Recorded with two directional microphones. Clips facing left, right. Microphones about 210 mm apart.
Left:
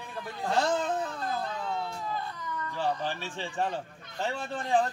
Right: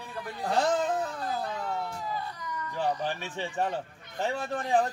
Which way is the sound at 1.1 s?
10° right (ahead or behind).